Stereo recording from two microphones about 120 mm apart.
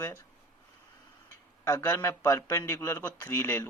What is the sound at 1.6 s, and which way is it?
Speech, 20° left (ahead or behind).